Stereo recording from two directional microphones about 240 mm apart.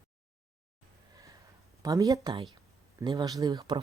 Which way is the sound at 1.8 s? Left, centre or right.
Centre.